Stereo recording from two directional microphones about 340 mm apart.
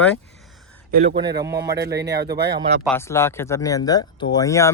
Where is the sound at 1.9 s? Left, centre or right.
Right.